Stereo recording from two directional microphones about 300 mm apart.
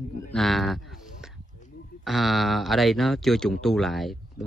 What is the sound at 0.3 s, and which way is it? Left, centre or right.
Speech, centre.